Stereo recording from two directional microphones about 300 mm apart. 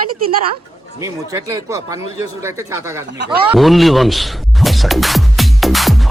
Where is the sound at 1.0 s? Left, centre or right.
Centre.